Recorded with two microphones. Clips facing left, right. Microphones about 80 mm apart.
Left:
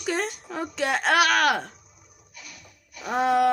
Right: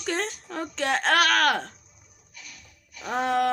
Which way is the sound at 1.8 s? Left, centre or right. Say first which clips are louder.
Left 3 dB; left.